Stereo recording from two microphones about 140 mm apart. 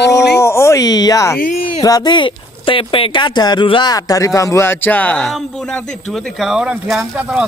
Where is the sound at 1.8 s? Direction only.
30° left (ahead or behind).